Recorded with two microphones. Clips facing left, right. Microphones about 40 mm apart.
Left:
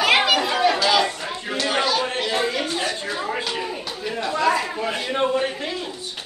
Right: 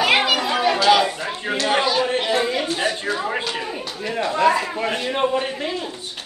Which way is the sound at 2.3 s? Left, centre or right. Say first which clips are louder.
Right 2 dB; centre.